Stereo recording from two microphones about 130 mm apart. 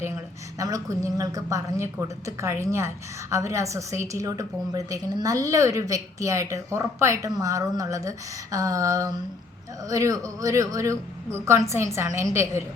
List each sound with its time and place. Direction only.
0.6 s a woman's voice: 25° right (ahead or behind)